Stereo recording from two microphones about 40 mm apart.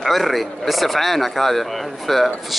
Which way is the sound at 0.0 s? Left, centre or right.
Centre.